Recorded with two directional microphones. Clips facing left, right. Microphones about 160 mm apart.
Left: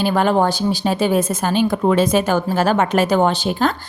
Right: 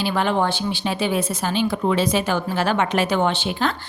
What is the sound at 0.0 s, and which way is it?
A woman's voice, 45° left (ahead or behind).